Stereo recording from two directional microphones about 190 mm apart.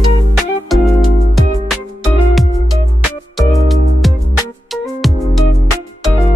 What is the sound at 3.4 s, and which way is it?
Music, centre (ahead or behind).